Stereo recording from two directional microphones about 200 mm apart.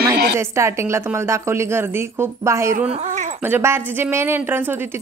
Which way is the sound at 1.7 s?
15° right (ahead or behind).